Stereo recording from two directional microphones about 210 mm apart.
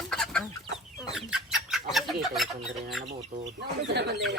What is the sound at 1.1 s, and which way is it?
Chicken, centre (ahead or behind).